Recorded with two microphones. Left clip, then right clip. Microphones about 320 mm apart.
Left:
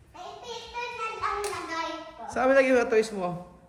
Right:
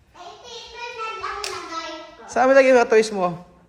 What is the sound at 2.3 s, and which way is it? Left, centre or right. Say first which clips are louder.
A woman's voice: right 7 dB; centre.